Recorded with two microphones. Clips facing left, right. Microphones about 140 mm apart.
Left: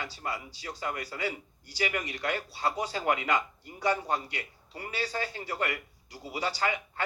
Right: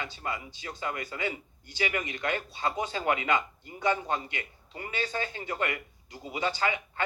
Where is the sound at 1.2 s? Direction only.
20° right (ahead or behind).